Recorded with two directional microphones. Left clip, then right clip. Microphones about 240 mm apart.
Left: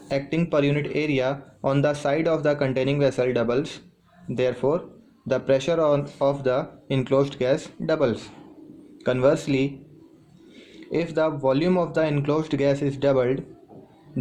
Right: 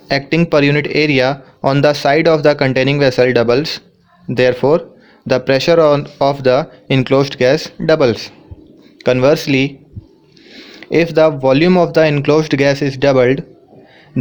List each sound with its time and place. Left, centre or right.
0.1 s speech: right